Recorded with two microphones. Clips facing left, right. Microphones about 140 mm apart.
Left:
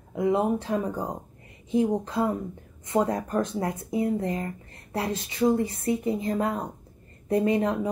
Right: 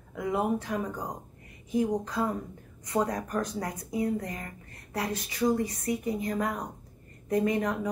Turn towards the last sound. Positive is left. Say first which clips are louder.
# left 4 dB
turn(degrees=25)  # may be behind; listen again after turning